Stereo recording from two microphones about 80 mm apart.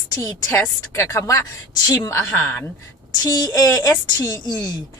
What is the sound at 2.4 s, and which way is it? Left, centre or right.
Speech, centre.